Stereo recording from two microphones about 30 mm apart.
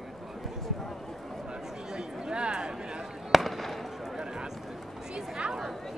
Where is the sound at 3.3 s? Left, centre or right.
Centre.